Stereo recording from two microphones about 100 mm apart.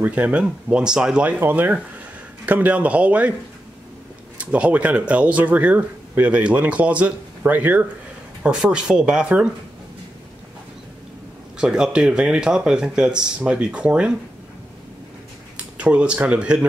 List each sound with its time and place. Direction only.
0.0 s speech: 15° right (ahead or behind)
4.4 s speech: 15° right (ahead or behind)
8.4 s speech: 5° right (ahead or behind)
11.5 s speech: 5° right (ahead or behind)
15.5 s speech: 10° right (ahead or behind)